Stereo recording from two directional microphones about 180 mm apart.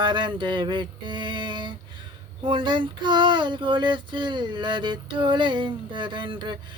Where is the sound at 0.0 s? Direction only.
25° right (ahead or behind).